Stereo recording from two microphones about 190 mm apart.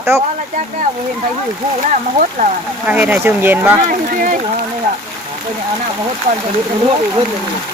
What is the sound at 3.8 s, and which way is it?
Speech, 45° right (ahead or behind).